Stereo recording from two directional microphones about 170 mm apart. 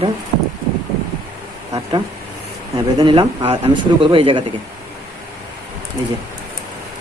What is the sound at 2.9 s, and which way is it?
Speech, 30° right (ahead or behind).